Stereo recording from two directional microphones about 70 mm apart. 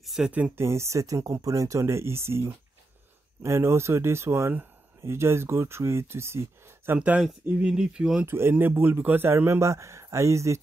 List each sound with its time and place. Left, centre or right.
0.0 s a sound: centre
0.6 s speech: right
7.0 s speech: centre
8.3 s speech: right